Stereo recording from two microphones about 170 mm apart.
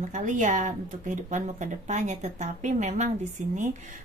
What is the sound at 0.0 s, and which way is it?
Speech, 50° right (ahead or behind).